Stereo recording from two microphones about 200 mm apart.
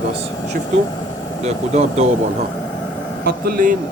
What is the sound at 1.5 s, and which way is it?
Speech, 30° right (ahead or behind).